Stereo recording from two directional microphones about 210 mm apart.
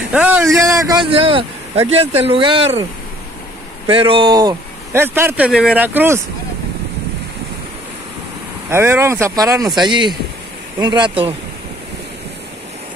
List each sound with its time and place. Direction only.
0.1 s speech: 5° right (ahead or behind)
0.7 s a sound: 15° right (ahead or behind)
1.1 s speech: 25° right (ahead or behind)
3.8 s speech: 25° right (ahead or behind)
8.6 s speech: 10° right (ahead or behind)